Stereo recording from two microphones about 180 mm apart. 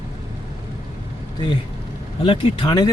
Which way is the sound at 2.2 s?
30° left (ahead or behind).